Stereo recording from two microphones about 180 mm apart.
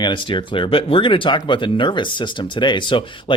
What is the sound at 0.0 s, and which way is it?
Speech, 25° left (ahead or behind).